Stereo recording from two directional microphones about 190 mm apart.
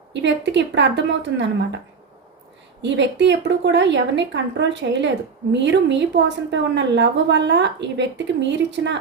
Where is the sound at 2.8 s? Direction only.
70° right (ahead or behind).